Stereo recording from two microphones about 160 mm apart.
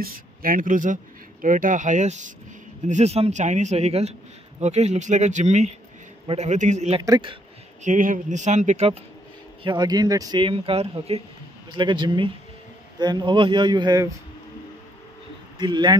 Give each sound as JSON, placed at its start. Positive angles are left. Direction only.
{"t": 0.0, "sound": "speech", "side_deg": -60}
{"t": 9.6, "sound": "speech", "side_deg": -30}
{"t": 11.7, "sound": "speech", "side_deg": -30}
{"t": 15.5, "sound": "speech", "side_deg": -30}